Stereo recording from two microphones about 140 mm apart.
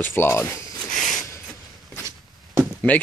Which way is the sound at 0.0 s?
15° left (ahead or behind).